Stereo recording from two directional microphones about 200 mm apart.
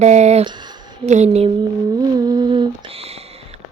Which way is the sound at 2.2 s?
20° right (ahead or behind).